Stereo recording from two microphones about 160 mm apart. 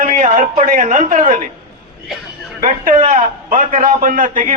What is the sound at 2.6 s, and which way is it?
A man's voice, 55° right (ahead or behind).